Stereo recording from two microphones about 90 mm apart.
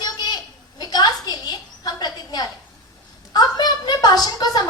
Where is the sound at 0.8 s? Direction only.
50° left (ahead or behind).